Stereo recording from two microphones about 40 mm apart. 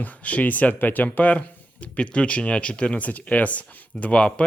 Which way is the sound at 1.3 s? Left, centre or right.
Left.